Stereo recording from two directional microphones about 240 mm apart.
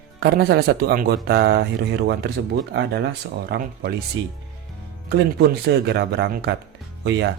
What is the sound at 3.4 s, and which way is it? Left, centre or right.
Speech, right.